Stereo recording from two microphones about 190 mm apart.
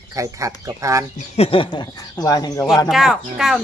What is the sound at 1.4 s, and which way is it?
Speech, 30° left (ahead or behind).